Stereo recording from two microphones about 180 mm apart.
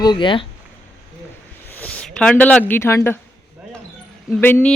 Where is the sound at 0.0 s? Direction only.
25° left (ahead or behind).